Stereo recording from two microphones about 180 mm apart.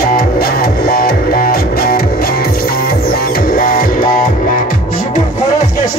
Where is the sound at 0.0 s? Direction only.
55° left (ahead or behind).